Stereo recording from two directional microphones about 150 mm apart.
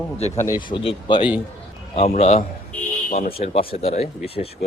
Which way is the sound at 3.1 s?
65° left (ahead or behind).